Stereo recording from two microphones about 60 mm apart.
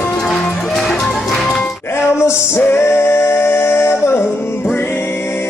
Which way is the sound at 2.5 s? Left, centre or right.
Left.